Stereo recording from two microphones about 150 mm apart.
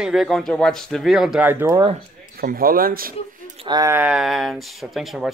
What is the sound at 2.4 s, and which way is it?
Speech, 75° right (ahead or behind).